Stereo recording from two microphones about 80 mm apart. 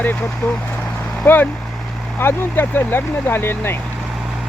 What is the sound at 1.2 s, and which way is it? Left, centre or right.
Speech, left.